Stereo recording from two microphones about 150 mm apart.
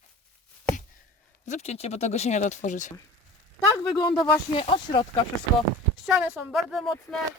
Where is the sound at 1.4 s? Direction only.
50° left (ahead or behind).